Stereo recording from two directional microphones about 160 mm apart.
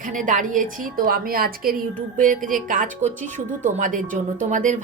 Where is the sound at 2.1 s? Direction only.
55° right (ahead or behind).